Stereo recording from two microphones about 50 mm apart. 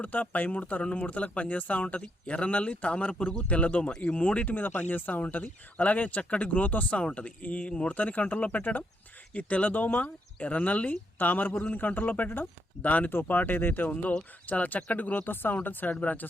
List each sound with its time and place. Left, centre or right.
0.0 s speech: left
4.4 s speech: left